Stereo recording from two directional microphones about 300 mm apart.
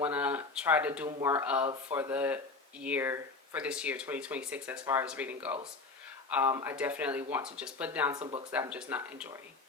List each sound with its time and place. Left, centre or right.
0.0 s speech: centre
8.2 s speech: centre
8.5 s speech: centre